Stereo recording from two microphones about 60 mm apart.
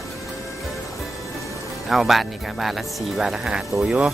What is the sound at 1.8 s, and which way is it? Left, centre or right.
Speech, centre.